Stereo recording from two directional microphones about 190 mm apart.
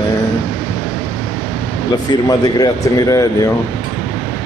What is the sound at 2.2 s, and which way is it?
Speech, 20° left (ahead or behind).